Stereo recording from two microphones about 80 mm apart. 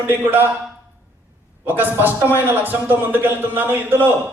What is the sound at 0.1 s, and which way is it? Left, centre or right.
Speech, right.